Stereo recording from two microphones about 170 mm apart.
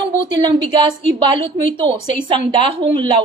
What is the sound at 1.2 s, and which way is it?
A woman's voice, 35° right (ahead or behind).